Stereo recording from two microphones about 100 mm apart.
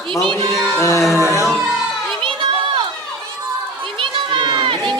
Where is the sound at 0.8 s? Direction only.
30° left (ahead or behind).